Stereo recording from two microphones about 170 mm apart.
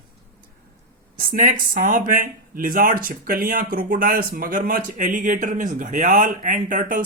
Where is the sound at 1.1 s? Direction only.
55° right (ahead or behind).